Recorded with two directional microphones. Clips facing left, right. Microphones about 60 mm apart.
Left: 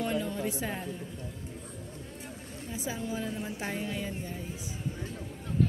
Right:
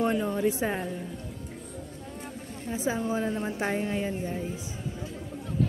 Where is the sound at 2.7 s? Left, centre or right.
Right.